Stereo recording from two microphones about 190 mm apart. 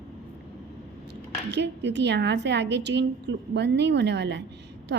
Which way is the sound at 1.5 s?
65° right (ahead or behind).